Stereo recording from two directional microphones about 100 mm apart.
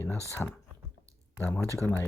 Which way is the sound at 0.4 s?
10° left (ahead or behind).